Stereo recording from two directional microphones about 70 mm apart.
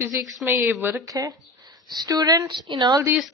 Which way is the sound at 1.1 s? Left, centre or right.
Right.